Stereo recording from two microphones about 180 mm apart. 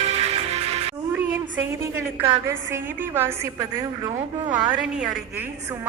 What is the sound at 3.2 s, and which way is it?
Speech, 15° right (ahead or behind).